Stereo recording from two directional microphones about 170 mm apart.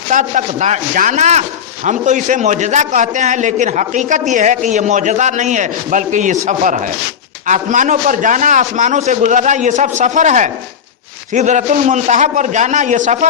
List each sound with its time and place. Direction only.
0.1 s speech: 50° right (ahead or behind)